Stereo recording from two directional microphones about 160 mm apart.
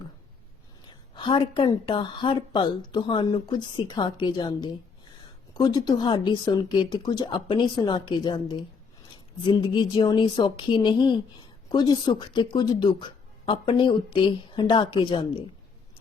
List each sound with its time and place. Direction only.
0.9 s speech: 30° left (ahead or behind)